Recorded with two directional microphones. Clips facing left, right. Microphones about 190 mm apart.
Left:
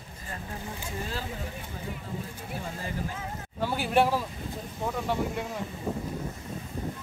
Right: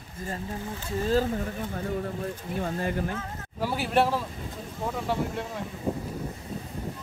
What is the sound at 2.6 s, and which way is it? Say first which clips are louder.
Speech: right 7 dB; 60° right (ahead or behind).